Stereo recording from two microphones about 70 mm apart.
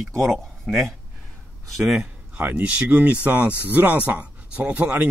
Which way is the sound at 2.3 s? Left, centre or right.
Right.